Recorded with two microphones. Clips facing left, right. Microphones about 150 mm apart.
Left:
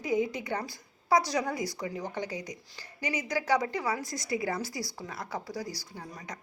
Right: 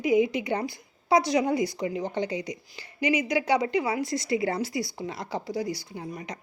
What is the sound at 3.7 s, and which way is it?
Speech, 70° right (ahead or behind).